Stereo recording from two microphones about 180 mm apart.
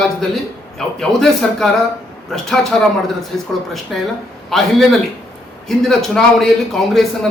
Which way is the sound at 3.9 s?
Centre (ahead or behind).